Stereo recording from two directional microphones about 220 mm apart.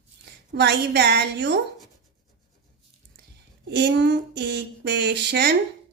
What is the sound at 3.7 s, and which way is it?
A woman's voice, 50° right (ahead or behind).